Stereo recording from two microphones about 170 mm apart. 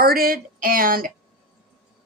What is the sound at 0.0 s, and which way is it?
Speech, 60° right (ahead or behind).